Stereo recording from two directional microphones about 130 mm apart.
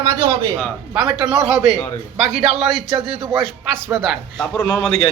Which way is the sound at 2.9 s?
45° right (ahead or behind).